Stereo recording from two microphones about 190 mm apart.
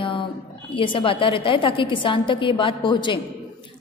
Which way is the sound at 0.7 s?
25° left (ahead or behind).